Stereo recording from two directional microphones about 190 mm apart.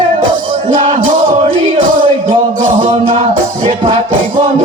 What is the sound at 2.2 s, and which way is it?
Music, 45° right (ahead or behind).